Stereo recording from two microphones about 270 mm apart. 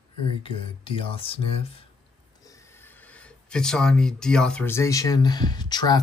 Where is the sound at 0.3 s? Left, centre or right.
Centre.